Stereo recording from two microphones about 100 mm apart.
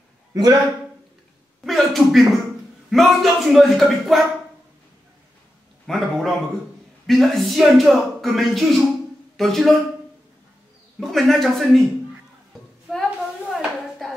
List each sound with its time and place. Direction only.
0.3 s speech: 40° right (ahead or behind)
1.6 s a sound: centre (ahead or behind)
2.9 s speech: centre (ahead or behind)
5.9 s speech: centre (ahead or behind)
11.0 s speech: centre (ahead or behind)
13.5 s dishes: centre (ahead or behind)